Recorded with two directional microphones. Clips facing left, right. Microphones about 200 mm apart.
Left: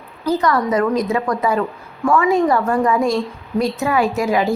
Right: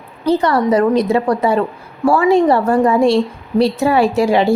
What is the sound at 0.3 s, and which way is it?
A woman's voice, 30° right (ahead or behind).